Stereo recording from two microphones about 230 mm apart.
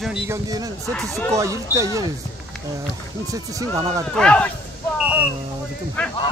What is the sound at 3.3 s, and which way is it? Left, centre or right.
Speech, centre.